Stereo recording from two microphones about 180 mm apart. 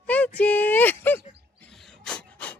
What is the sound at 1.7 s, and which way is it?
Pant, centre (ahead or behind).